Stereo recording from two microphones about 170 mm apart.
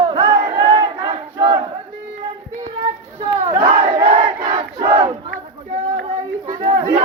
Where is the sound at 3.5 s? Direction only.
40° right (ahead or behind).